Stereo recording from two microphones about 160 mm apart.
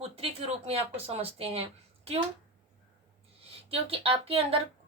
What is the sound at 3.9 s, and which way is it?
Speech, 35° right (ahead or behind).